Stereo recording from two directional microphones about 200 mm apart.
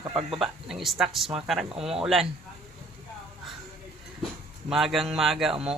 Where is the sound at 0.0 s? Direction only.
25° right (ahead or behind).